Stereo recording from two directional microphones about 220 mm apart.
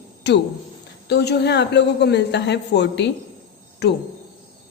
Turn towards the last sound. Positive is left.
turn(degrees=50)  # may be behind; listen again after turning